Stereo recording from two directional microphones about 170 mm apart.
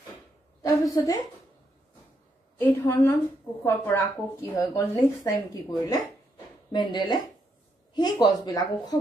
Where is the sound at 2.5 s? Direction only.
10° left (ahead or behind).